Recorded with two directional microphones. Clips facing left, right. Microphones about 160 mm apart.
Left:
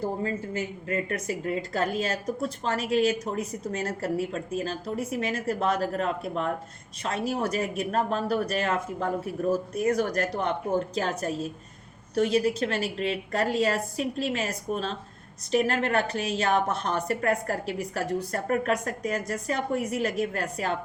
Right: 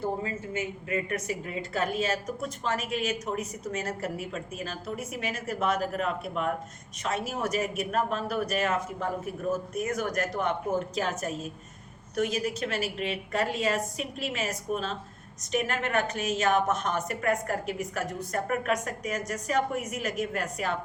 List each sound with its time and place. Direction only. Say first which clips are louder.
0.2 s a woman's voice: left 3 dB; 35° left (ahead or behind)